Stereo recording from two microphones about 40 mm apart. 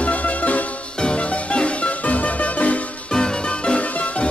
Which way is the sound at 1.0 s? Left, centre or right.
Left.